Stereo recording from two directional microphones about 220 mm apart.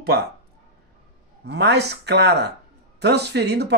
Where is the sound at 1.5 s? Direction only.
50° right (ahead or behind).